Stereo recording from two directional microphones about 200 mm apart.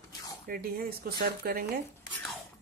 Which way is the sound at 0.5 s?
50° right (ahead or behind).